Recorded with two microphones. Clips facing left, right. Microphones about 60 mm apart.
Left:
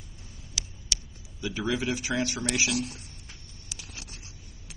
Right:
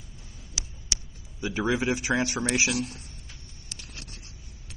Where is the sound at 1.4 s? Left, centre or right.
Right.